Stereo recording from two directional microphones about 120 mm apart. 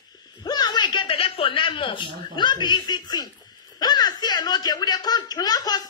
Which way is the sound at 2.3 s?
40° left (ahead or behind).